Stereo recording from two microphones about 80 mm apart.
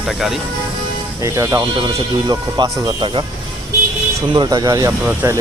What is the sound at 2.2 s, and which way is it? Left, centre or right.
Speech, right.